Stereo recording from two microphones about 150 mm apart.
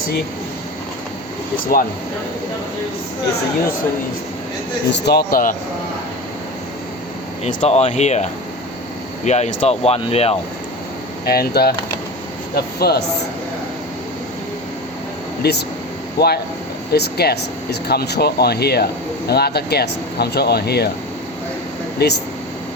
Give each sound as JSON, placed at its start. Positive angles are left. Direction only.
{"t": 1.5, "sound": "speech", "side_deg": 65}
{"t": 5.0, "sound": "speech", "side_deg": 80}
{"t": 7.4, "sound": "speech", "side_deg": 45}
{"t": 11.3, "sound": "speech", "side_deg": 90}
{"t": 15.4, "sound": "speech", "side_deg": 90}
{"t": 22.0, "sound": "speech", "side_deg": 90}